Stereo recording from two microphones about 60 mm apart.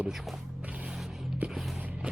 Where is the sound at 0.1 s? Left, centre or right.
Centre.